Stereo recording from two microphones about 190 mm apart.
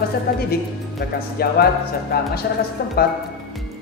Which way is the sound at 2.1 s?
55° left (ahead or behind).